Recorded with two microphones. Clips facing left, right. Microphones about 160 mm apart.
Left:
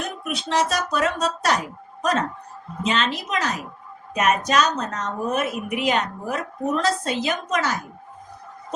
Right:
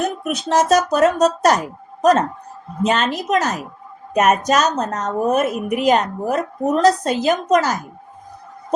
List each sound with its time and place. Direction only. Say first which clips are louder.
0.3 s a woman's voice: right 7 dB; 45° right (ahead or behind)